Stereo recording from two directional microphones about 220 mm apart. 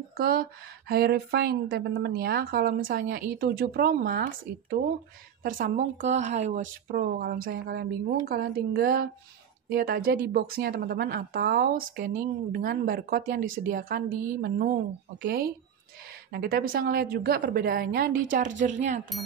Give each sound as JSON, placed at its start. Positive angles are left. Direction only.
{"t": 0.2, "sound": "a woman's voice", "side_deg": -45}
{"t": 15.2, "sound": "a woman's voice", "side_deg": -40}